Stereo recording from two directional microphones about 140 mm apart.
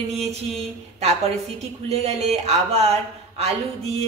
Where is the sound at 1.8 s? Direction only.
50° right (ahead or behind).